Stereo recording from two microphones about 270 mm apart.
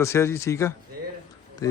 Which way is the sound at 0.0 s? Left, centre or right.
Centre.